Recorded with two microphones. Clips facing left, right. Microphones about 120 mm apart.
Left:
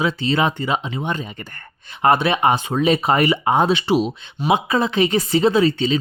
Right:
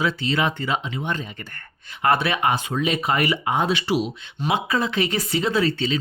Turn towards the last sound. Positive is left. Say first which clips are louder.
# left 5 dB
turn(degrees=20)  # may be behind; listen again after turning